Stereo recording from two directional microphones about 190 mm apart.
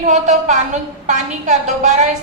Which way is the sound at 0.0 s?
40° right (ahead or behind).